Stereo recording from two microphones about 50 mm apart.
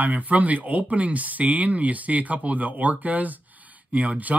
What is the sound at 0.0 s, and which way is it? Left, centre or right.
Speech, right.